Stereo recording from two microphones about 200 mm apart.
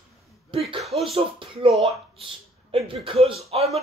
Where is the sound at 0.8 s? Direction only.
Centre (ahead or behind).